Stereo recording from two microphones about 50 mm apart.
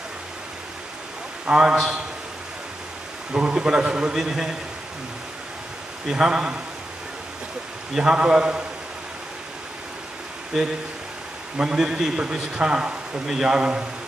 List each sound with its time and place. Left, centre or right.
1.4 s a man's voice: centre
3.3 s a man's voice: centre
6.0 s a man's voice: centre
7.9 s a man's voice: centre
10.5 s a man's voice: centre